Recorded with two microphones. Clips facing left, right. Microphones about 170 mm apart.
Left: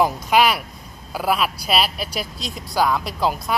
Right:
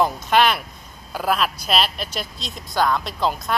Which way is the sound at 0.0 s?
10° left (ahead or behind).